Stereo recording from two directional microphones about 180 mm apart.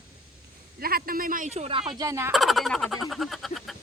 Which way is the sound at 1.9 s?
20° right (ahead or behind).